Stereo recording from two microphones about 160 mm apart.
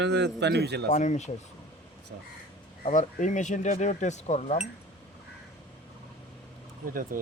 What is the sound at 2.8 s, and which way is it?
Speech, 50° left (ahead or behind).